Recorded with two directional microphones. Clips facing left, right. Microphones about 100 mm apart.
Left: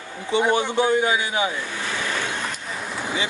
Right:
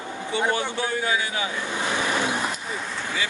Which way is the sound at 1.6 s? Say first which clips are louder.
Right 2 dB; 20° right (ahead or behind).